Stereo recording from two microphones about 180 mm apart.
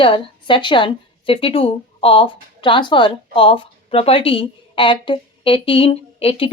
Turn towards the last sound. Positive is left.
turn(degrees=30)  # may be behind; listen again after turning